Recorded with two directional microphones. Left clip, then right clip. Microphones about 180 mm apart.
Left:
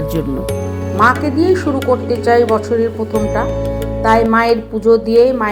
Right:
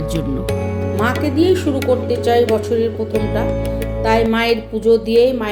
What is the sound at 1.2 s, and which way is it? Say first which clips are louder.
A woman's voice: left 1 dB; 25° right (ahead or behind).